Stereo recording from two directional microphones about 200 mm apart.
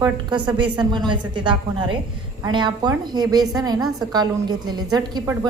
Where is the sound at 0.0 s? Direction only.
20° right (ahead or behind).